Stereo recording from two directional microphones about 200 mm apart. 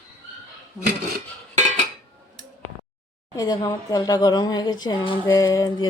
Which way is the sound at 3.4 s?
20° left (ahead or behind).